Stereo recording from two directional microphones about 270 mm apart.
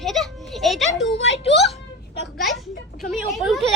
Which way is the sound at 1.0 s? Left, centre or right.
Left.